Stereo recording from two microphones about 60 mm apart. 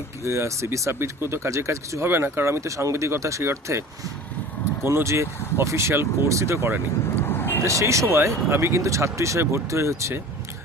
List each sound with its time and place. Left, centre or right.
0.3 s speech: right
2.0 s speech: right
7.2 s vehicle: left
7.6 s speech: right